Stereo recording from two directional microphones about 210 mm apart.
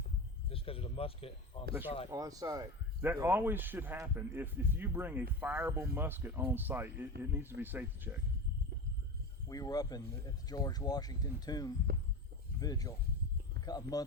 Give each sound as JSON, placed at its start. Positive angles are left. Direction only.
{"t": 0.5, "sound": "speech", "side_deg": 25}
{"t": 2.0, "sound": "speech", "side_deg": -15}
{"t": 9.5, "sound": "speech", "side_deg": 15}
{"t": 11.9, "sound": "heart sounds", "side_deg": -45}
{"t": 12.5, "sound": "speech", "side_deg": 15}